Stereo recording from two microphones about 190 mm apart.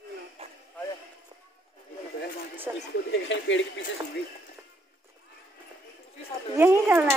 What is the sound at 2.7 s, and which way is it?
Speech, 20° right (ahead or behind).